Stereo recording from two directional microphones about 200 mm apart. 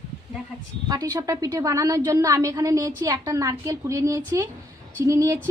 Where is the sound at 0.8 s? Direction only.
20° right (ahead or behind).